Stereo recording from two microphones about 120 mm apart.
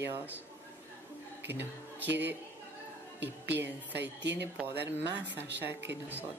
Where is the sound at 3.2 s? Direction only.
15° right (ahead or behind).